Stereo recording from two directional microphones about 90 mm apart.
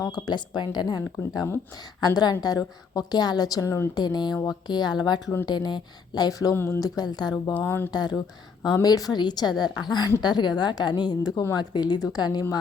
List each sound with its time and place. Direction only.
0.0 s a woman's voice: 50° left (ahead or behind)
4.0 s a woman's voice: 50° left (ahead or behind)
6.5 s speech: 30° left (ahead or behind)
6.7 s a woman's voice: 45° left (ahead or behind)
7.5 s speech: 25° left (ahead or behind)
8.6 s a woman's voice: 45° left (ahead or behind)